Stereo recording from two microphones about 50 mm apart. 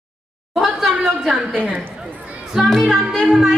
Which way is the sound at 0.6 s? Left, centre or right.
Centre.